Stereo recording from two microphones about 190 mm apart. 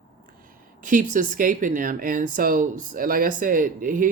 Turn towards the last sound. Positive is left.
turn(degrees=-45)  # may be behind; listen again after turning